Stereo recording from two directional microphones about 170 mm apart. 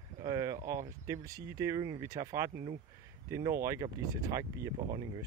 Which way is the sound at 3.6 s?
20° right (ahead or behind).